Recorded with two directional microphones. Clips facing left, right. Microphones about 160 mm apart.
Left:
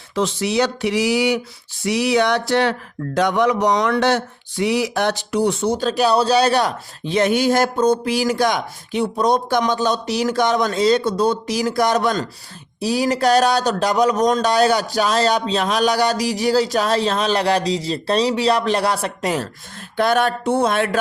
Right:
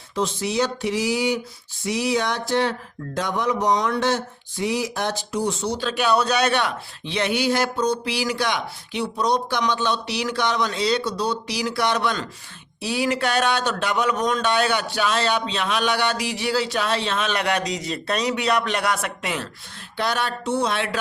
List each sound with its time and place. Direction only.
0.1 s a sound: 90° left
3.2 s speech: 75° left (ahead or behind); by 19.5 s 40° left (ahead or behind)
20.0 s speech: 50° left (ahead or behind)